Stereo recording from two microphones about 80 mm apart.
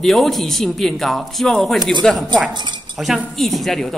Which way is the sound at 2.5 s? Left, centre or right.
Right.